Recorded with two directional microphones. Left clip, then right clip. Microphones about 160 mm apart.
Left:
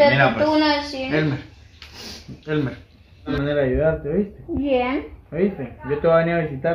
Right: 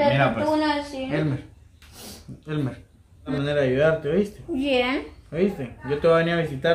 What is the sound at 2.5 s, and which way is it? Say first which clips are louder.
A woman's voice: left 6 dB; 15° right (ahead or behind).